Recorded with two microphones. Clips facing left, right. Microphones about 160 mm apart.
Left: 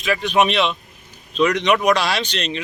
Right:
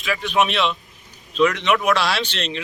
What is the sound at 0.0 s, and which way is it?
Speech, 20° left (ahead or behind).